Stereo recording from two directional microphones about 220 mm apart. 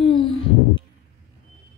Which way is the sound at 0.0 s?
25° left (ahead or behind).